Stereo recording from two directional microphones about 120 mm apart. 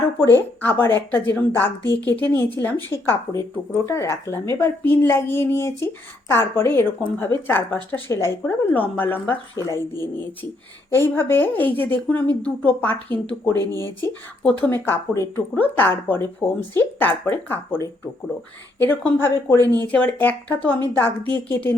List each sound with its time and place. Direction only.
0.2 s speech: 20° left (ahead or behind)
18.8 s speech: 15° left (ahead or behind)